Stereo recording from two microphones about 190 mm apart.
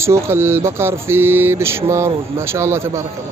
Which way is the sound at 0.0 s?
15° right (ahead or behind).